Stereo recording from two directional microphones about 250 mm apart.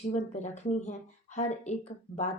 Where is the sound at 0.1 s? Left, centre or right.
Left.